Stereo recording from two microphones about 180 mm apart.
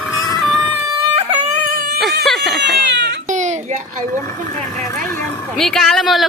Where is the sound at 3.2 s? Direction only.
40° right (ahead or behind).